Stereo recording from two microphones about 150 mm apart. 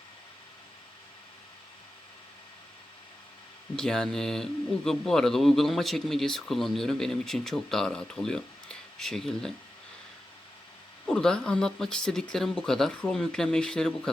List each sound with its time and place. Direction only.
3.8 s speech: 5° left (ahead or behind)
11.0 s speech: 5° left (ahead or behind)